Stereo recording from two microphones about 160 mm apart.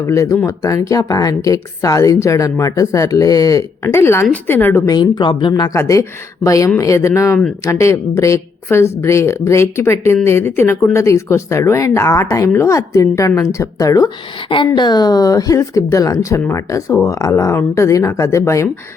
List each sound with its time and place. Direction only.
0.0 s speech: 20° left (ahead or behind)
4.9 s a woman's voice: 30° left (ahead or behind)